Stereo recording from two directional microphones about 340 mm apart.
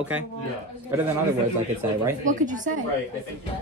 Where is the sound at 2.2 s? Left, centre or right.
Right.